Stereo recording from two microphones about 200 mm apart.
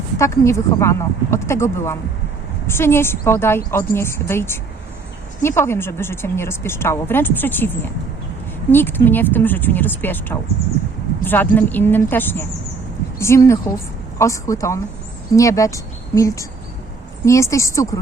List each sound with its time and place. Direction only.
0.2 s a woman's voice: 15° left (ahead or behind)
8.7 s a woman's voice: 10° left (ahead or behind)